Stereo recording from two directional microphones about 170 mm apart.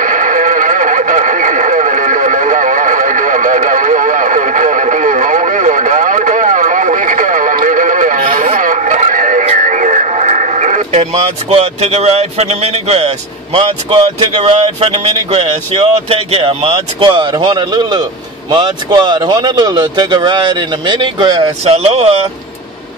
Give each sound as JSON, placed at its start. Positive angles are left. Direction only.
{"t": 0.0, "sound": "radio", "side_deg": -50}
{"t": 11.5, "sound": "a man's voice", "side_deg": -40}